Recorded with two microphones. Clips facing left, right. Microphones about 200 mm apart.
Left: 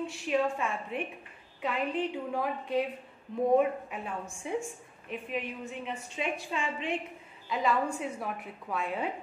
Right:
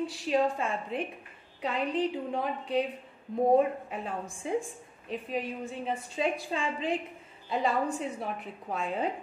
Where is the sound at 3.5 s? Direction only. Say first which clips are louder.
Right 1 dB; 35° right (ahead or behind).